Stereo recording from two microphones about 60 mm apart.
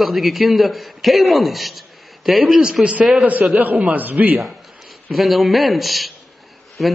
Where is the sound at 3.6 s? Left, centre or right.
Right.